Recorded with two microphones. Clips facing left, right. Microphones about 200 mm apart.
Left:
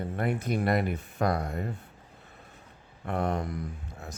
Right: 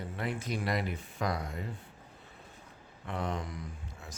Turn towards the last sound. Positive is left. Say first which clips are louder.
# left 5 dB
turn(degrees=60)  # may be behind; listen again after turning